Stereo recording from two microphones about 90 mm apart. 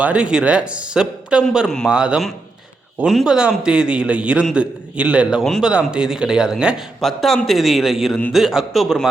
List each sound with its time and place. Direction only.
0.0 s a man's voice: 10° right (ahead or behind)